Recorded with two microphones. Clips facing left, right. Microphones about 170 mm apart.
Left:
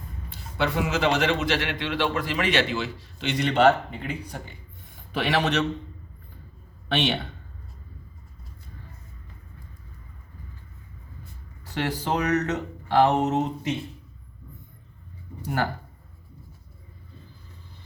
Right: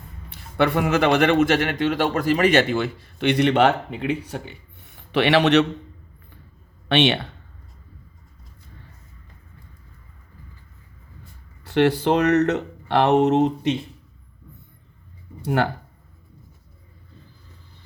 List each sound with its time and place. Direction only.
0.3 s a man's voice: 60° right (ahead or behind)
6.8 s a man's voice: 75° right (ahead or behind)
11.6 s speech: 70° right (ahead or behind)
15.4 s speech: 75° right (ahead or behind)